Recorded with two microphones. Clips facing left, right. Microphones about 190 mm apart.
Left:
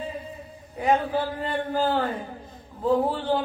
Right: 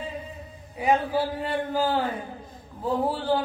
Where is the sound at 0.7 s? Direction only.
10° right (ahead or behind).